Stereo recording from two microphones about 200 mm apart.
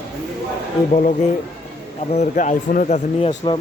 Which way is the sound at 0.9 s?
40° left (ahead or behind).